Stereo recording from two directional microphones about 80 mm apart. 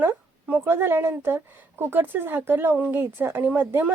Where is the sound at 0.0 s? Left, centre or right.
Centre.